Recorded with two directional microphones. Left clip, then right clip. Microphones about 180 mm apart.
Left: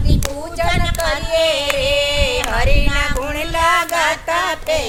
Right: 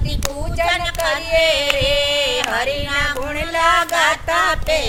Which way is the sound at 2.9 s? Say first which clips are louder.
Even; 30° right (ahead or behind).